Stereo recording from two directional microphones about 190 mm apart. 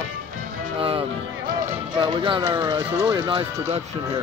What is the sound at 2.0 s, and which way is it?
Speech, 25° right (ahead or behind).